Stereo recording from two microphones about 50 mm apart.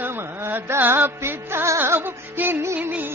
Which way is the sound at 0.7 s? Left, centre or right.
Right.